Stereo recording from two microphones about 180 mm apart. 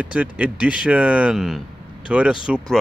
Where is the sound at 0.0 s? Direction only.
10° right (ahead or behind).